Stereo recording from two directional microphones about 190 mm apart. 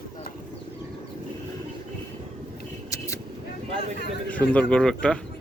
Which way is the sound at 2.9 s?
15° left (ahead or behind).